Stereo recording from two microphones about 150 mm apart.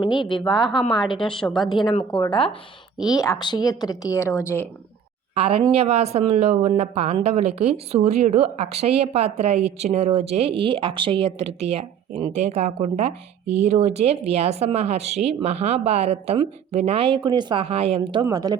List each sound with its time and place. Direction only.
0.0 s a woman's voice: 30° left (ahead or behind)
0.4 s speech: centre (ahead or behind)
0.7 s a woman's voice: 30° left (ahead or behind)
1.4 s speech: centre (ahead or behind)
2.0 s speech: 30° left (ahead or behind)
3.0 s a woman's voice: 25° left (ahead or behind)
5.3 s speech: 40° right (ahead or behind)